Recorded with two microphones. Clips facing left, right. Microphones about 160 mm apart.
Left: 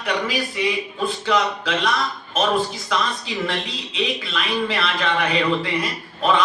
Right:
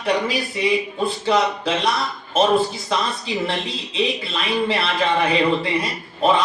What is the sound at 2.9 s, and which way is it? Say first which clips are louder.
Speech: left 1 dB; 30° right (ahead or behind).